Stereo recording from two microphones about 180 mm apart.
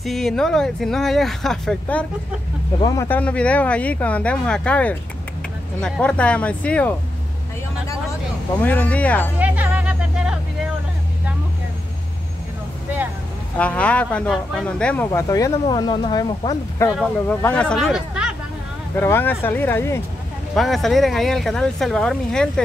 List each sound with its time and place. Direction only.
0.0 s speech: centre (ahead or behind)
8.5 s speech: 10° left (ahead or behind)
9.4 s a sound: 10° right (ahead or behind)
13.6 s speech: 5° left (ahead or behind)
15.0 s speech: 20° left (ahead or behind)
16.9 s speech: 5° left (ahead or behind)
18.9 s speech: 10° left (ahead or behind)
20.5 s speech: centre (ahead or behind)